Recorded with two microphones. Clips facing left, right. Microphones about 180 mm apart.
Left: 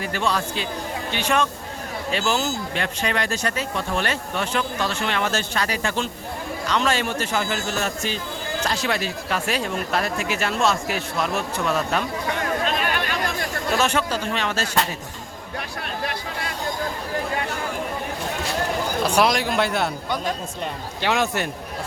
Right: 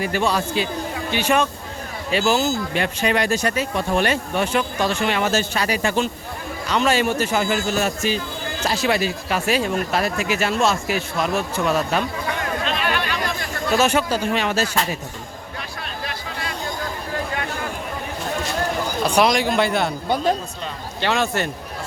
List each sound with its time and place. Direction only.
0.0 s speech: 10° right (ahead or behind)
12.4 s chatter: 45° left (ahead or behind)
13.7 s speech: 5° right (ahead or behind)
19.0 s speech: 5° left (ahead or behind)
21.0 s a man's voice: 15° left (ahead or behind)